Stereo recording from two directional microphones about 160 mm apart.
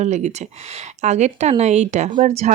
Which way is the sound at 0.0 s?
45° right (ahead or behind).